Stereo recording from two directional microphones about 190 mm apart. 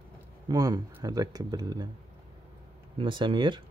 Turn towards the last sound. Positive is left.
turn(degrees=-25)  # may be behind; listen again after turning